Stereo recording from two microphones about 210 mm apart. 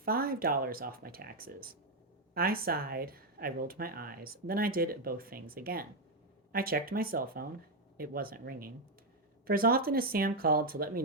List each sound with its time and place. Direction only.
0.0 s speech: 45° right (ahead or behind)